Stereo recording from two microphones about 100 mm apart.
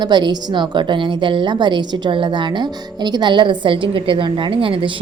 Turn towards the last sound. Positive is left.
turn(degrees=-60)  # may be behind; listen again after turning